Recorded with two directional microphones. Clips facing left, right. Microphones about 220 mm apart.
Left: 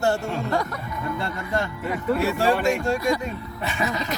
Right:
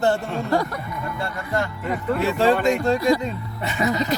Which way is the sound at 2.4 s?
20° right (ahead or behind).